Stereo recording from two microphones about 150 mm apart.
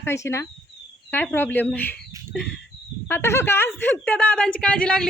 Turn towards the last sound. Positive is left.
turn(degrees=5)  # may be behind; listen again after turning